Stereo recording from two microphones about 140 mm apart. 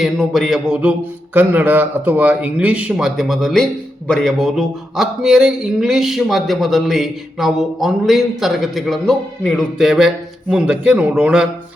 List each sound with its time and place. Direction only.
0.0 s a man's voice: centre (ahead or behind)